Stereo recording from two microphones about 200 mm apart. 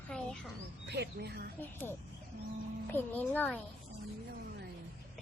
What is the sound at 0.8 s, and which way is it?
Speech, 55° right (ahead or behind).